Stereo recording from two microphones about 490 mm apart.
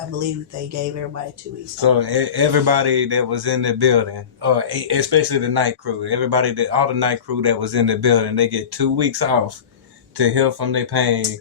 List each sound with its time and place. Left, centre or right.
1.8 s speech: right